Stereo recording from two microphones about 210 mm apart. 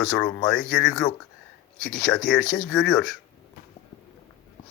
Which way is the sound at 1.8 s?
50° left (ahead or behind).